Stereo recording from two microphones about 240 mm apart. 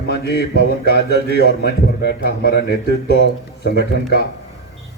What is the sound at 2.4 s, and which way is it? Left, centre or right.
Speech, left.